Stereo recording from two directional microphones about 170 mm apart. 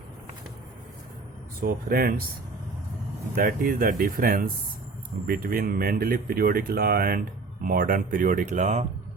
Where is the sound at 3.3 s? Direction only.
60° right (ahead or behind).